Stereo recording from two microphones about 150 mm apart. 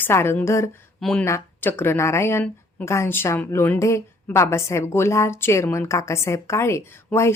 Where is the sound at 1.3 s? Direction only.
15° left (ahead or behind).